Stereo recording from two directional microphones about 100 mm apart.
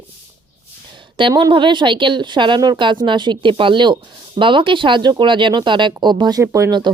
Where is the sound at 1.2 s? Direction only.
55° right (ahead or behind).